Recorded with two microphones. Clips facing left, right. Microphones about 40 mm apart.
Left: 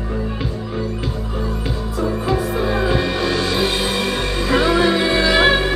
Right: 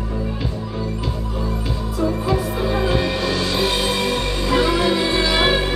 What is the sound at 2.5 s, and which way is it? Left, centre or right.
Music, centre.